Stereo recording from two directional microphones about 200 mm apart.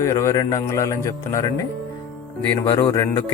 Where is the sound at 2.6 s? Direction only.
20° left (ahead or behind).